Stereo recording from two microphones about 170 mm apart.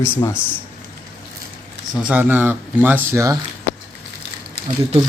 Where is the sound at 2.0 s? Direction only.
10° right (ahead or behind).